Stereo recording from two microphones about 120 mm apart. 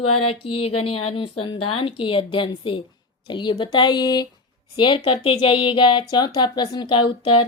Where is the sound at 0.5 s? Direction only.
55° left (ahead or behind); by 4.3 s 35° left (ahead or behind).